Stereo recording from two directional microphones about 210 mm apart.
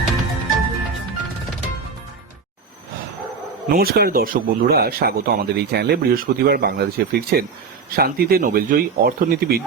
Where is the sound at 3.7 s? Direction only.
45° right (ahead or behind).